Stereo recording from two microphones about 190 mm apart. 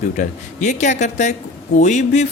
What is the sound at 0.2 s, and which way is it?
Speech, 40° left (ahead or behind).